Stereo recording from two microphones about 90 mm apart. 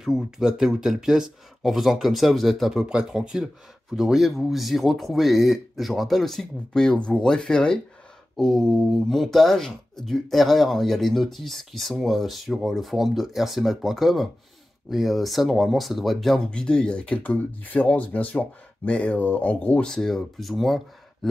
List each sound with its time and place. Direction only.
0.0 s speech: 5° right (ahead or behind); by 19.9 s 15° left (ahead or behind)
19.9 s speech: 5° left (ahead or behind)